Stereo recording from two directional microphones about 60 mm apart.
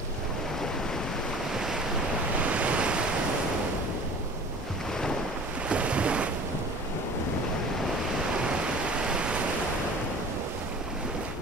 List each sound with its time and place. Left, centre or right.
1.5 s waves: centre
2.5 s waves: right
5.7 s waves: centre
8.5 s waves: centre